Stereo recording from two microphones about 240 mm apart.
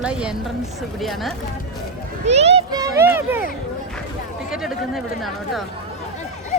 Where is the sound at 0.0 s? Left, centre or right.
Centre.